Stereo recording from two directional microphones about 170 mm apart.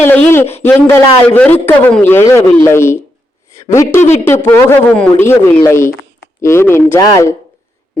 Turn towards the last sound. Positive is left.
turn(degrees=20)  # may be behind; listen again after turning